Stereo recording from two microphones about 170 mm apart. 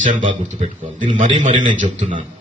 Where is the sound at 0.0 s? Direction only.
50° right (ahead or behind).